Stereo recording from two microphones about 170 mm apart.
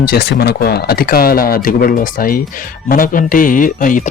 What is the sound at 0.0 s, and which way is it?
Speech, 65° left (ahead or behind).